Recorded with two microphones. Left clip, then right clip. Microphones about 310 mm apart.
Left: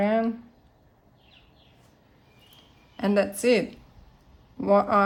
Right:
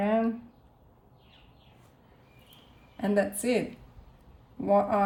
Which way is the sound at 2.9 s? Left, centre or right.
Centre.